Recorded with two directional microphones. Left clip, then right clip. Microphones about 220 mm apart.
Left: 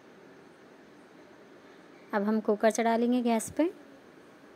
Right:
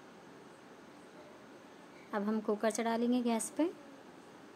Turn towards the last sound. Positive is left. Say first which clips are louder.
# left 6 dB
turn(degrees=20)  # may be behind; listen again after turning